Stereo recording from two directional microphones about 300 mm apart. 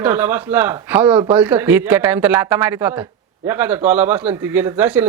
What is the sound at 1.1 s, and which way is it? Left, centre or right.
Speech, centre.